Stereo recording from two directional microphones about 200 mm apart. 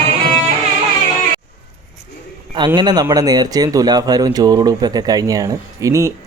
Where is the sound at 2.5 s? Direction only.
20° right (ahead or behind).